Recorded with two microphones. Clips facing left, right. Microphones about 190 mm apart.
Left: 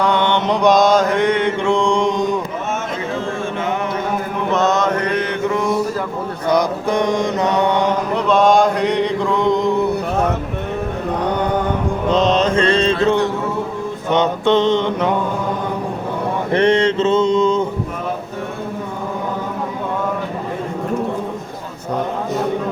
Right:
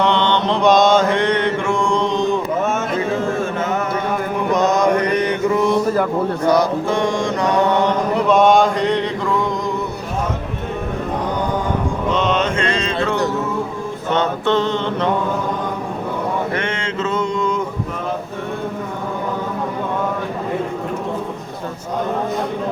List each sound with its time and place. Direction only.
0.0 s mantra: 10° left (ahead or behind)
4.5 s mantra: 15° right (ahead or behind)
6.5 s mantra: 15° left (ahead or behind)
8.1 s a sound: 5° right (ahead or behind); by 9.5 s 15° left (ahead or behind)
12.1 s mantra: 35° left (ahead or behind)
14.1 s mantra: 15° left (ahead or behind)
16.5 s mantra: 35° left (ahead or behind)